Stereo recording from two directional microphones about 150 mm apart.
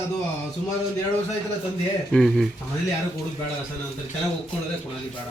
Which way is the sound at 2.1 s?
Centre (ahead or behind).